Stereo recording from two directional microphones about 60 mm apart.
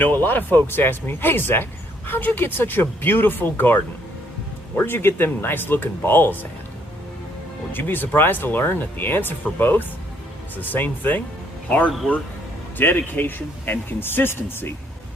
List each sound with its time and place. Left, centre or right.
0.0 s speech: left
4.8 s speech: left
7.7 s speech: left
12.7 s speech: left